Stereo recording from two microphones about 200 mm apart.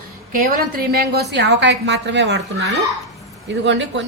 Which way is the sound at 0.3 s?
50° right (ahead or behind).